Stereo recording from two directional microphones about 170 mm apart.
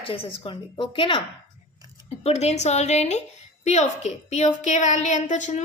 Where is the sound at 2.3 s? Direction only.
40° left (ahead or behind).